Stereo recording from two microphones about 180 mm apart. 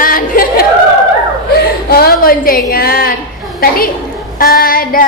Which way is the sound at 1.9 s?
55° left (ahead or behind).